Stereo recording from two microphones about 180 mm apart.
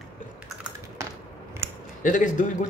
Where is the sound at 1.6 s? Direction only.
15° right (ahead or behind).